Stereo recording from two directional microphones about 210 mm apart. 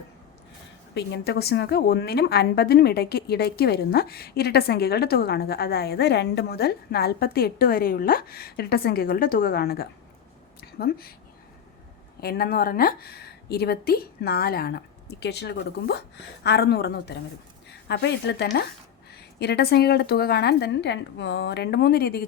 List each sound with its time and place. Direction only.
0.9 s a woman's voice: 55° left (ahead or behind)
10.6 s a sound: 45° left (ahead or behind)
12.2 s a woman's voice: 45° left (ahead or behind)